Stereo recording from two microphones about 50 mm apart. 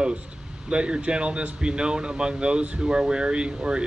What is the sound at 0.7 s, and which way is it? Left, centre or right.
Speech, right.